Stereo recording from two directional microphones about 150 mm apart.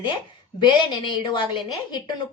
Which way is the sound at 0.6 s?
30° left (ahead or behind).